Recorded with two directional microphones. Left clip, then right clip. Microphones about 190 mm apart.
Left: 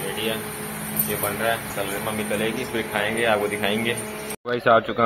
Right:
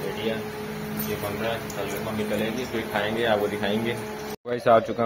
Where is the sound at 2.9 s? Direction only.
10° right (ahead or behind).